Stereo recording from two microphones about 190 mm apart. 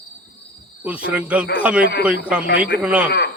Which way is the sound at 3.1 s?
60° left (ahead or behind).